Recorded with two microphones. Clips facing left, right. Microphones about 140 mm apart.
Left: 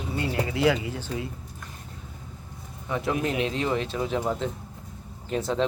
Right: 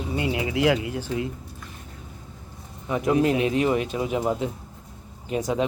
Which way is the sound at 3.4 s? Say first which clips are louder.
Right 4 dB; 15° right (ahead or behind).